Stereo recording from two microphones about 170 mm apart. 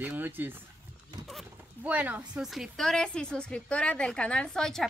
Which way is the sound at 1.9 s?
10° right (ahead or behind).